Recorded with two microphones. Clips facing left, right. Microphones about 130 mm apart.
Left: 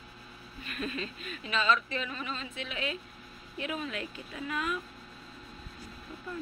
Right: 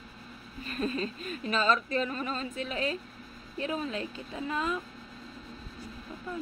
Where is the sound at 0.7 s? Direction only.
35° right (ahead or behind).